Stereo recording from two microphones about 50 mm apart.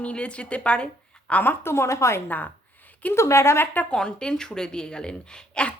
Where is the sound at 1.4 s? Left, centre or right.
Left.